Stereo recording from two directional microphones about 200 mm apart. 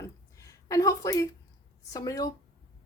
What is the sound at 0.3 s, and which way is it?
A woman's voice, 15° left (ahead or behind).